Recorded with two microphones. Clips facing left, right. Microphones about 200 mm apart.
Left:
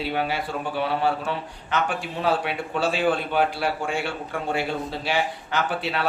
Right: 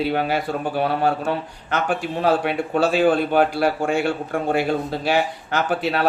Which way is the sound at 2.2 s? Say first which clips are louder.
Right 4 dB; 45° right (ahead or behind).